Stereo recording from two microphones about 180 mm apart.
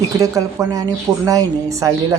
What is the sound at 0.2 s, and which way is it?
A woman's voice, 20° right (ahead or behind).